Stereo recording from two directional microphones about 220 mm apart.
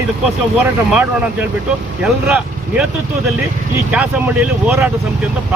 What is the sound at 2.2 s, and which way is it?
Speech, 5° right (ahead or behind).